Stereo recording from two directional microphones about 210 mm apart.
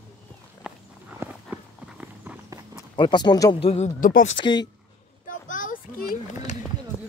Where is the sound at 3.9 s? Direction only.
40° left (ahead or behind).